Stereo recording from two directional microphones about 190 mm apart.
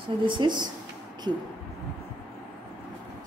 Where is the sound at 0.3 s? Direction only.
25° right (ahead or behind).